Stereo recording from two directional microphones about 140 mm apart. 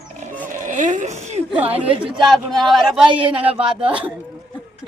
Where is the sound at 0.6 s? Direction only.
65° right (ahead or behind).